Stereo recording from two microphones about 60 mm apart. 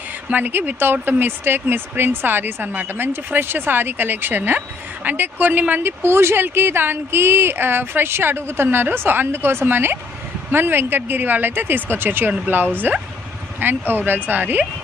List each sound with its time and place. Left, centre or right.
0.3 s speech: right
6.0 s speech: right